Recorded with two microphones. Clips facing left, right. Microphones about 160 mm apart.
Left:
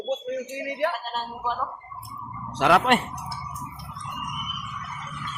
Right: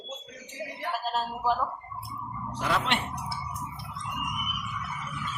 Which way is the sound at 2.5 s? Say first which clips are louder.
Left 9 dB; 85° left.